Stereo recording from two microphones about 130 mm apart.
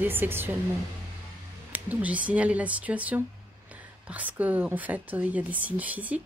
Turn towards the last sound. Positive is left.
turn(degrees=-10)  # may be behind; listen again after turning